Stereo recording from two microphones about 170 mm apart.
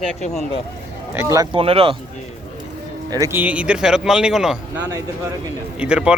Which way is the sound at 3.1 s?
15° right (ahead or behind).